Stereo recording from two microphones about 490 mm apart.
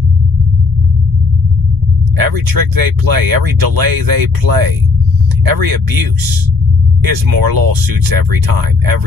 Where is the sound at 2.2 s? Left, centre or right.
Right.